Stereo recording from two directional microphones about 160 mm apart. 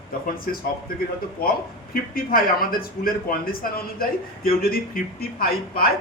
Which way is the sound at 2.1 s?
65° left (ahead or behind).